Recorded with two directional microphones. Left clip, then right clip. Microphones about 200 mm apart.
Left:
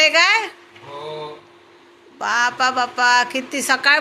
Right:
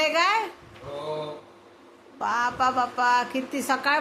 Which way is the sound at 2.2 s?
Centre (ahead or behind).